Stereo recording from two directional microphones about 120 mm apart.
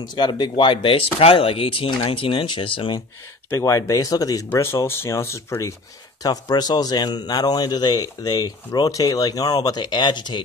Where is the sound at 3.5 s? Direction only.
25° left (ahead or behind).